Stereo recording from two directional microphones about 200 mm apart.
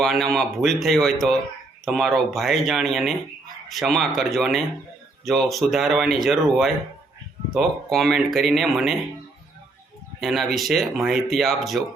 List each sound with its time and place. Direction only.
0.0 s speech: centre (ahead or behind)
10.2 s speech: centre (ahead or behind)